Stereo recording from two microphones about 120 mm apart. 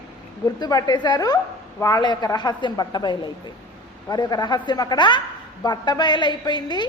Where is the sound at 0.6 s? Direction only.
35° left (ahead or behind).